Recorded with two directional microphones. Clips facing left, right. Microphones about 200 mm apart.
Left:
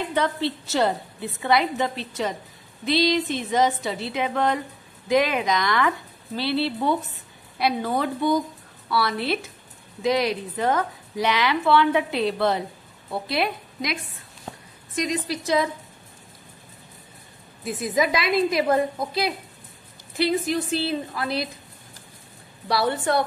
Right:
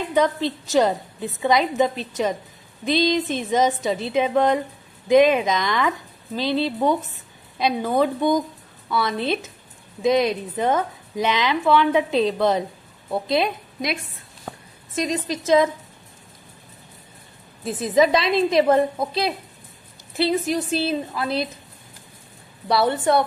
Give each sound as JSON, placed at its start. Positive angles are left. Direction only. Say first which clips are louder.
{"t": 0.1, "sound": "a woman's voice", "louder": "right 6 dB", "side_deg": -15}
{"t": 15.0, "sound": "a woman's voice", "louder": "right 2 dB", "side_deg": -20}
{"t": 17.7, "sound": "a woman's voice", "louder": "right 6 dB", "side_deg": -30}
{"t": 20.8, "sound": "a woman's voice", "louder": "right 2 dB", "side_deg": -20}
{"t": 22.7, "sound": "a woman's voice", "louder": "right 4 dB", "side_deg": -20}